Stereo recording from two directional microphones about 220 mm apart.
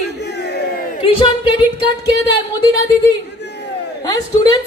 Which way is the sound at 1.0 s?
25° left (ahead or behind).